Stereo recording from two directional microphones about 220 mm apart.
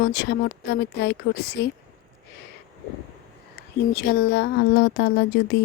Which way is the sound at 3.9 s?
50° left (ahead or behind).